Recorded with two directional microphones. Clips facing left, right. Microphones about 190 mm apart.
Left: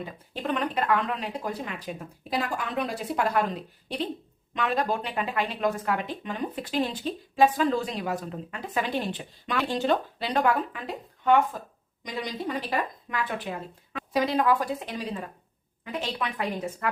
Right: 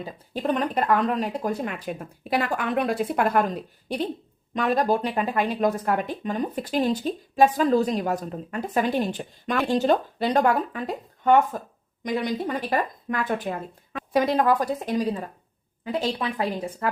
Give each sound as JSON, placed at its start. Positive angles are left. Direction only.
{"t": 0.0, "sound": "speech", "side_deg": -40}